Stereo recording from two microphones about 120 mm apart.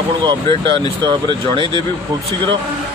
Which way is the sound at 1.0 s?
45° right (ahead or behind).